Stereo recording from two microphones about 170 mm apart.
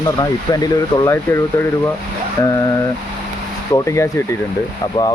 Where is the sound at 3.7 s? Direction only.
15° left (ahead or behind).